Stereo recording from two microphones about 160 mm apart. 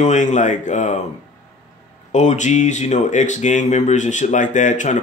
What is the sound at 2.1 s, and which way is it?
Speech, 50° left (ahead or behind).